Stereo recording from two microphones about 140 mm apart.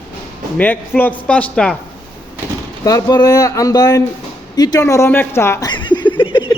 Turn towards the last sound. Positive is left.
turn(degrees=35)  # may be behind; listen again after turning